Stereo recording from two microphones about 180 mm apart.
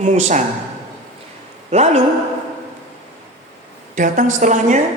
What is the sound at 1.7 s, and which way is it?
Speech, 35° right (ahead or behind).